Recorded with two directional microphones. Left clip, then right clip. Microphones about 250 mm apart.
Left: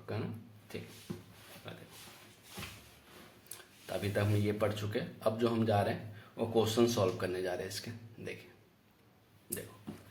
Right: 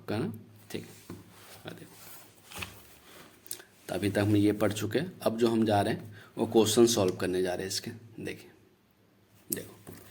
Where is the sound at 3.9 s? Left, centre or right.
Right.